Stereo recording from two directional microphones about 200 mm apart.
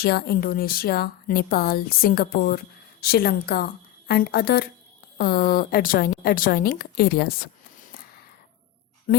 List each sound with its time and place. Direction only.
0.0 s a woman's voice: 50° left (ahead or behind)
9.1 s speech: 45° left (ahead or behind)